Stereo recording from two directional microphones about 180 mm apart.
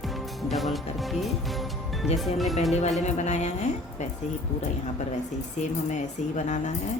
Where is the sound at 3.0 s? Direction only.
40° left (ahead or behind).